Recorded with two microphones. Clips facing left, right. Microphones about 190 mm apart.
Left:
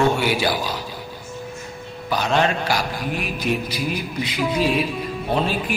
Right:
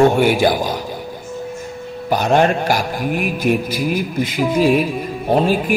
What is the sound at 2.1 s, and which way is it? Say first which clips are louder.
A man's voice: right 6 dB; 50° right (ahead or behind).